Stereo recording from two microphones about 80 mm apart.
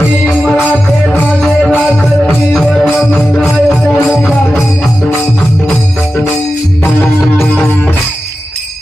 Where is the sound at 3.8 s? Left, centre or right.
Left.